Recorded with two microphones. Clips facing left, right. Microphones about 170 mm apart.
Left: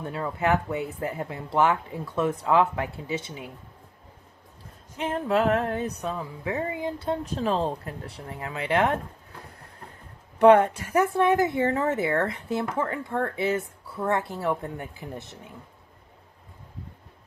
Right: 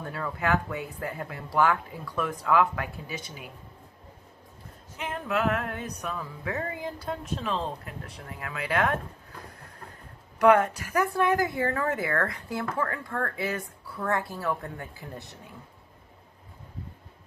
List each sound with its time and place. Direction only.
0.0 s a woman's voice: 20° left (ahead or behind)
4.9 s a woman's voice: 30° left (ahead or behind)
7.4 s a woman's voice: 40° left (ahead or behind)
10.3 s a woman's voice: 30° left (ahead or behind)